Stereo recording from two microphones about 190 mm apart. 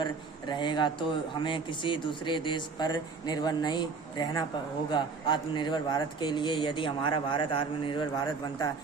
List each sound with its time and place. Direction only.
0.0 s speech: 25° left (ahead or behind)